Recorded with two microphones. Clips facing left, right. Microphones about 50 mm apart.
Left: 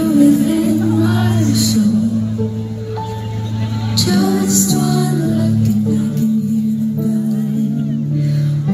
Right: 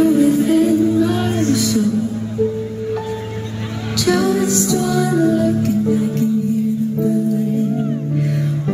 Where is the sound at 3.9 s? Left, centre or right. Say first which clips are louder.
Even; right.